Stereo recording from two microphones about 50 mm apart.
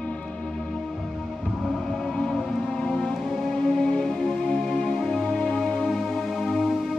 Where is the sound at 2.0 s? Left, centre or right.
Centre.